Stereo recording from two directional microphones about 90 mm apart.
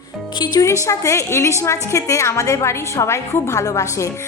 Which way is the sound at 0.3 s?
55° left (ahead or behind).